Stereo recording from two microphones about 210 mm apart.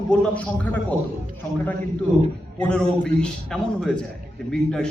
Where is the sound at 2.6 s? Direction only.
5° left (ahead or behind).